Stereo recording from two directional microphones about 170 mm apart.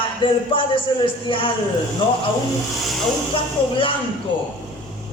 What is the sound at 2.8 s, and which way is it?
Speech, centre (ahead or behind).